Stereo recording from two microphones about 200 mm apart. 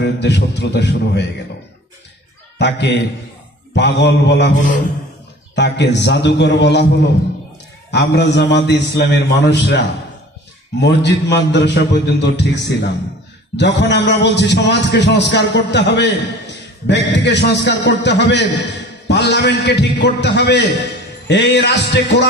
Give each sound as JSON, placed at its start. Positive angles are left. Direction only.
{"t": 0.0, "sound": "a man's voice", "side_deg": 60}
{"t": 2.6, "sound": "a man's voice", "side_deg": 60}
{"t": 4.6, "sound": "a man's voice", "side_deg": 40}
{"t": 5.6, "sound": "a man's voice", "side_deg": 60}